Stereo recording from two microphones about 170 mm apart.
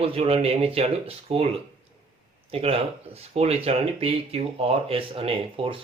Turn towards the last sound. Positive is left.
turn(degrees=-35)  # may be behind; listen again after turning